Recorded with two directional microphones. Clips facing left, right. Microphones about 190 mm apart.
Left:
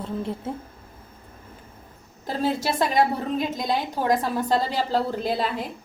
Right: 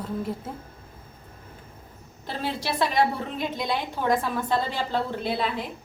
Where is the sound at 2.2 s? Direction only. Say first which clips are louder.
Left 5 dB; 40° left (ahead or behind).